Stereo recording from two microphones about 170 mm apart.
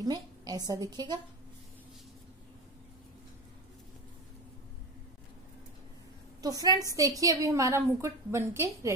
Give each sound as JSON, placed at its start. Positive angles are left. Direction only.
{"t": 0.0, "sound": "a woman's voice", "side_deg": -25}
{"t": 6.4, "sound": "a woman's voice", "side_deg": -20}